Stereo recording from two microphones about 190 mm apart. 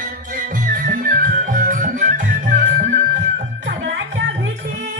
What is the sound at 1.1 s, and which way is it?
Music, 45° right (ahead or behind).